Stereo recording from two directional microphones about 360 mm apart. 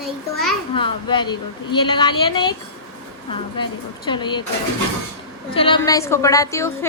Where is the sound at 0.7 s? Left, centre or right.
Centre.